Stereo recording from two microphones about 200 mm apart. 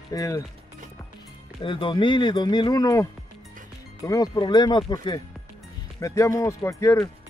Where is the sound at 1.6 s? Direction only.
25° left (ahead or behind).